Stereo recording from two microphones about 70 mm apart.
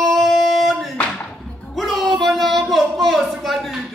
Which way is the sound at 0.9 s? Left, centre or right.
Centre.